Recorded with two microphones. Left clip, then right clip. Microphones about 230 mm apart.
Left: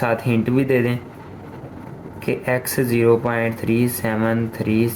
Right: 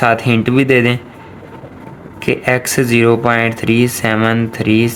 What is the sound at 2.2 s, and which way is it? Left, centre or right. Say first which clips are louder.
Speech: right 7 dB; right.